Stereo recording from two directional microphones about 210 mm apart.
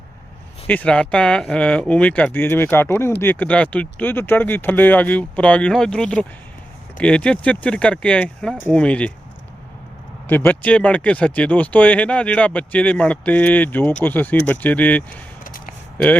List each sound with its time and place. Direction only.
0.7 s speech: 5° left (ahead or behind)
10.2 s speech: 10° left (ahead or behind)
15.4 s a sound: 40° left (ahead or behind)